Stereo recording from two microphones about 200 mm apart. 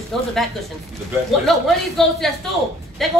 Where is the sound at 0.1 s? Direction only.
5° left (ahead or behind).